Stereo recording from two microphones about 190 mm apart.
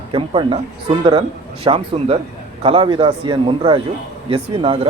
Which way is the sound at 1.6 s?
30° right (ahead or behind).